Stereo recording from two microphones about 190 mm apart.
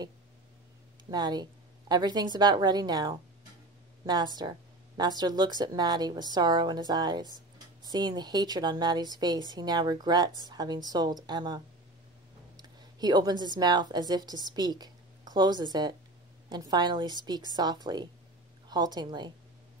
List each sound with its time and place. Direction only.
1.1 s a woman's voice: 20° right (ahead or behind)